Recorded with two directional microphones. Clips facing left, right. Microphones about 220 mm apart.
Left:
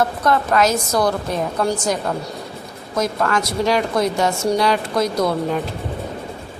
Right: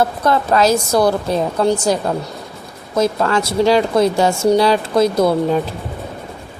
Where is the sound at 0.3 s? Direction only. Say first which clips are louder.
Right 3 dB; 30° right (ahead or behind).